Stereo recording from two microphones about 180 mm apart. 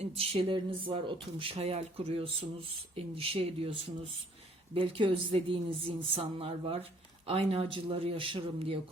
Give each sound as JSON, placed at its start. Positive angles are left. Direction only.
{"t": 0.0, "sound": "speech", "side_deg": -30}